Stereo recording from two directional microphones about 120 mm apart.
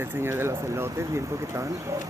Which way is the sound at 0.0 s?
20° right (ahead or behind).